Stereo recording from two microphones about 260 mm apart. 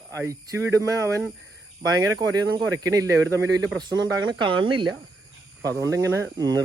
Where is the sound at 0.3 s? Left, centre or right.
Centre.